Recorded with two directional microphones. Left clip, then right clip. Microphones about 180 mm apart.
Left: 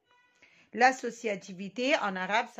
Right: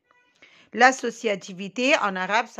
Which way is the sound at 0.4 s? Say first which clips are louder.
Right 7 dB; 35° right (ahead or behind).